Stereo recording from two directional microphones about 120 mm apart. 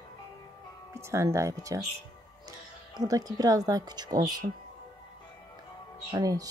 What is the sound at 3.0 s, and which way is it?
Speech, 30° right (ahead or behind).